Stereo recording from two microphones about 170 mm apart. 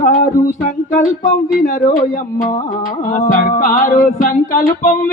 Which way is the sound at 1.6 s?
50° left (ahead or behind).